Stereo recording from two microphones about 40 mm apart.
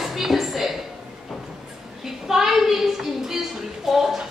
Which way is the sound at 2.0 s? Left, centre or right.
Centre.